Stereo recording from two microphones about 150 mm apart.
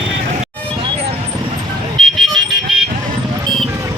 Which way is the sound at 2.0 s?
Centre (ahead or behind).